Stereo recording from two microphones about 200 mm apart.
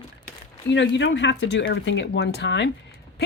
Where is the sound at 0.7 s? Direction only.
60° left (ahead or behind).